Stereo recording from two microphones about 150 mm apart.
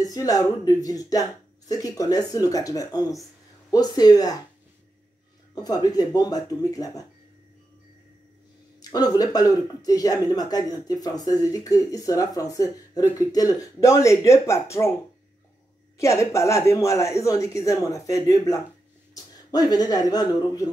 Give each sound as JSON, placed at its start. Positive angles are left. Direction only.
{"t": 0.0, "sound": "speech", "side_deg": 25}
{"t": 5.5, "sound": "speech", "side_deg": 25}
{"t": 8.9, "sound": "speech", "side_deg": 25}
{"t": 16.0, "sound": "speech", "side_deg": 20}